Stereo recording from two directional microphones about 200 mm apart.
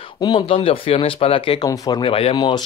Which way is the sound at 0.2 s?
25° left (ahead or behind).